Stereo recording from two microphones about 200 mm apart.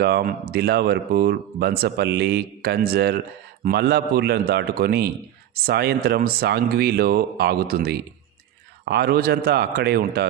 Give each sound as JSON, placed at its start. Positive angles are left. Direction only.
{"t": 0.0, "sound": "speech", "side_deg": -50}